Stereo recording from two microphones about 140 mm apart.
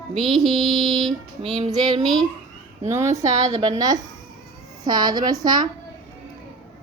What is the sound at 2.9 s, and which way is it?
Speech, 20° right (ahead or behind).